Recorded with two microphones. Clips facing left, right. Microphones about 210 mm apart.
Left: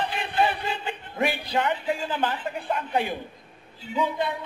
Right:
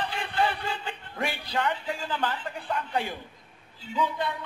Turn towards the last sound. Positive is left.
turn(degrees=20)  # may be behind; listen again after turning